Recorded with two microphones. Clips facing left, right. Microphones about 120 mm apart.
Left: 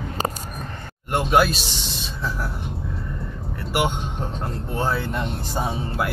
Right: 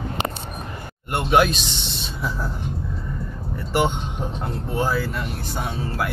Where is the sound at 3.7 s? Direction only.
10° left (ahead or behind).